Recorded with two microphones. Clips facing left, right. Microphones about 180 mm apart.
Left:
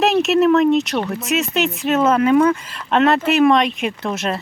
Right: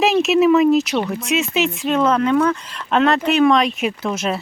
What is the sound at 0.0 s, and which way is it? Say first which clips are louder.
Speech: even; centre (ahead or behind).